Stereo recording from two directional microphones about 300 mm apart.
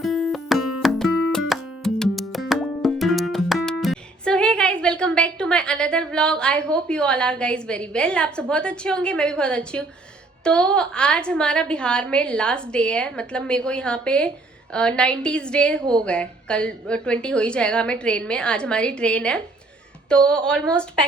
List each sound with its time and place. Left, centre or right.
0.0 s music: centre
10.4 s a woman's voice: centre